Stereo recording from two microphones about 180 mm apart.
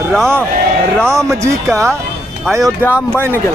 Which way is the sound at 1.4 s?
15° right (ahead or behind).